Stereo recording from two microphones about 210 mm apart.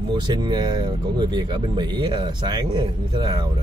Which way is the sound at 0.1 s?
20° right (ahead or behind).